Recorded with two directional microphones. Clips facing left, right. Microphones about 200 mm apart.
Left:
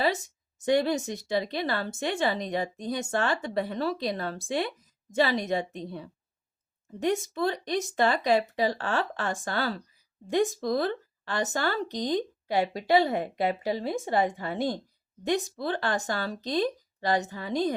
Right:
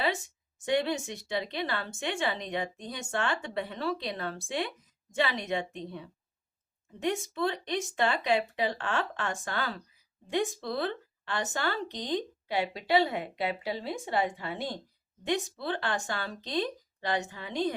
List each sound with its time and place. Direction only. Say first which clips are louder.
0.6 s speech: left 4 dB; 40° left (ahead or behind)